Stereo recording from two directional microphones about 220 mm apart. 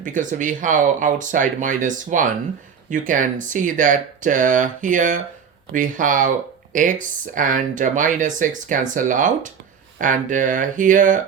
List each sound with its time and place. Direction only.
0.0 s speech: 35° right (ahead or behind)